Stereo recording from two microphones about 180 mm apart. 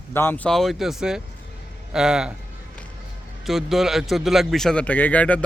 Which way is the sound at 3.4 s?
Centre (ahead or behind).